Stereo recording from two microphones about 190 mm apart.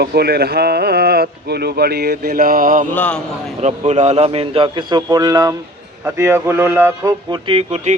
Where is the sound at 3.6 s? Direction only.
35° right (ahead or behind).